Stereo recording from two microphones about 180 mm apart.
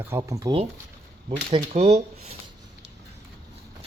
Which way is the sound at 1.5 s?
35° right (ahead or behind).